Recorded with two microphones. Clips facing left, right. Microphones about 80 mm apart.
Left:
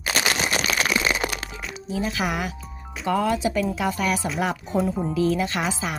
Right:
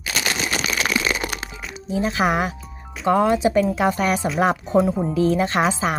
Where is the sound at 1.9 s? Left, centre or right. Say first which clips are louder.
Right 6 dB; right.